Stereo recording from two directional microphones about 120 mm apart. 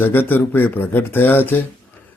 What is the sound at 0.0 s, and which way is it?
Speech, 15° left (ahead or behind).